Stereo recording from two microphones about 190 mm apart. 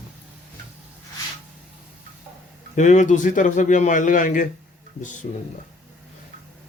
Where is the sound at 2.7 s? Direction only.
40° left (ahead or behind).